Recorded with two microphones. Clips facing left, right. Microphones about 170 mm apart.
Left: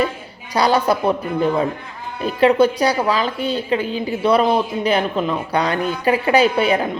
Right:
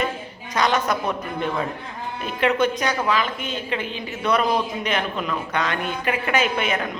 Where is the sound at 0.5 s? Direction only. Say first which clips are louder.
Left 5 dB; 35° left (ahead or behind).